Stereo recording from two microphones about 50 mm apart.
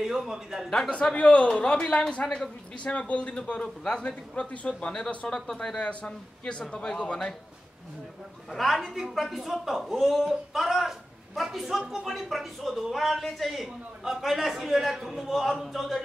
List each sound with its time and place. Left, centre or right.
0.0 s a man's voice: centre
0.7 s speech: centre
1.5 s speech: centre
2.2 s speech: centre
2.8 s a man's voice: left
5.3 s speech: centre
5.8 s a man's voice: left
8.5 s speech: centre